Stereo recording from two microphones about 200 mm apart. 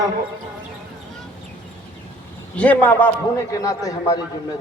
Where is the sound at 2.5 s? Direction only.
5° left (ahead or behind).